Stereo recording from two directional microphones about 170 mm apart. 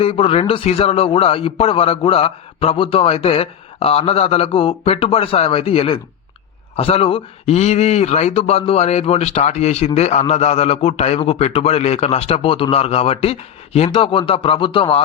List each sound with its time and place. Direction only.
0.0 s speech: 35° left (ahead or behind)